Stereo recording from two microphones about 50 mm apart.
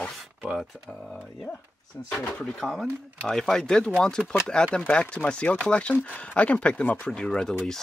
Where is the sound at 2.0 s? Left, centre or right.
Left.